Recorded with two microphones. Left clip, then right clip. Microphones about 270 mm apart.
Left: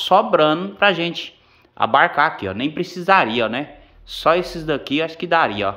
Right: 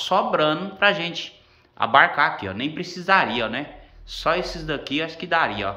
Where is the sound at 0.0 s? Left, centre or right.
Left.